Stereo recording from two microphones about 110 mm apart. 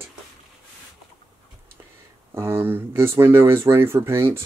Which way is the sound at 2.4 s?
20° right (ahead or behind).